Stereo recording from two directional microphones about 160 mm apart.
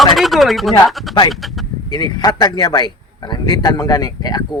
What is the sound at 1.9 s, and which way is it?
Speech, 25° left (ahead or behind).